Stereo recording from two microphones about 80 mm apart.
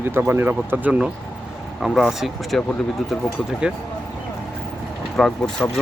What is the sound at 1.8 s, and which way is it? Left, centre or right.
Speech, centre.